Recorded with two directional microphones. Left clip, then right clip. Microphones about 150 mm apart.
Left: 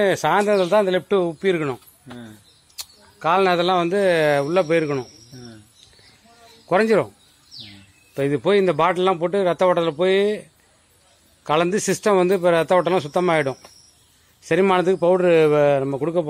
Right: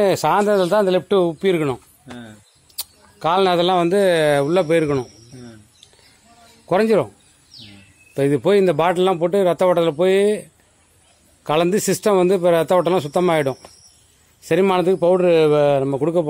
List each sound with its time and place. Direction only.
0.0 s a man's voice: 30° right (ahead or behind)
6.7 s a man's voice: 15° right (ahead or behind)
8.1 s a man's voice: 25° right (ahead or behind); by 16.0 s 10° right (ahead or behind)
16.0 s a man's voice: 25° right (ahead or behind)